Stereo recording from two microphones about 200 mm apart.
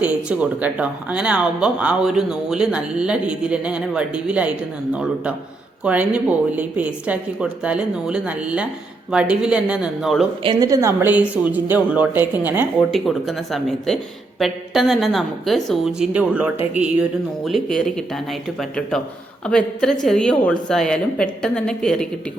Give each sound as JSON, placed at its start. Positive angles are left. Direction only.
{"t": 0.0, "sound": "a woman's voice", "side_deg": -5}
{"t": 10.4, "sound": "a woman's voice", "side_deg": -20}
{"t": 19.5, "sound": "a woman's voice", "side_deg": 5}